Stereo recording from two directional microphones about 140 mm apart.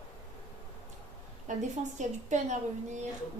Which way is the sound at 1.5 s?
60° right (ahead or behind).